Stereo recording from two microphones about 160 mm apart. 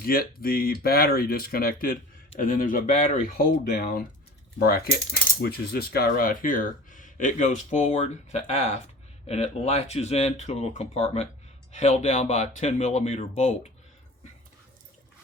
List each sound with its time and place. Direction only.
0.0 s speech: 70° left (ahead or behind); by 13.5 s 45° left (ahead or behind)